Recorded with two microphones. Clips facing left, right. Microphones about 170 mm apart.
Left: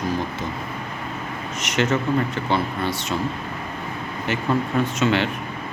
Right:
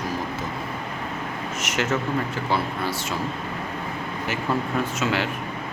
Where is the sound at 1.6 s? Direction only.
5° right (ahead or behind).